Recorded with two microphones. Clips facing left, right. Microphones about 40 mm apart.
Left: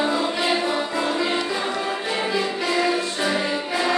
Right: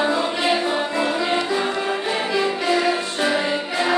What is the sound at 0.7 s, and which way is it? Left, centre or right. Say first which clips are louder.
Music: right 2 dB; right.